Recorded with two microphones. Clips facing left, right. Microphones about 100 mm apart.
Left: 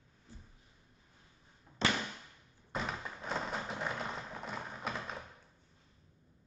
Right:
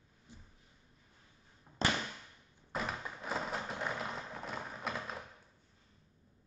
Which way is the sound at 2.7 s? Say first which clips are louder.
Even; centre (ahead or behind).